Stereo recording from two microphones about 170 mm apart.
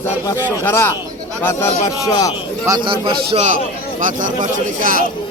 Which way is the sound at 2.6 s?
25° right (ahead or behind).